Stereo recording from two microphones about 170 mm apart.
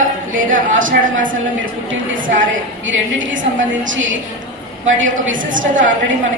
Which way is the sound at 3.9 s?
90° right.